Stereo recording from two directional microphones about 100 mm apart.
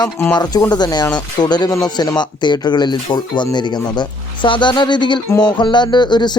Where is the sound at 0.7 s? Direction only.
45° left (ahead or behind).